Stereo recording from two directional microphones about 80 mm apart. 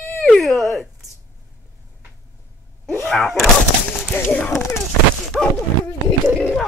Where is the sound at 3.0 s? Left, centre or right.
Centre.